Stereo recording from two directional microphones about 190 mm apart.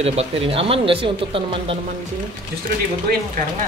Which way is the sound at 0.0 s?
35° right (ahead or behind).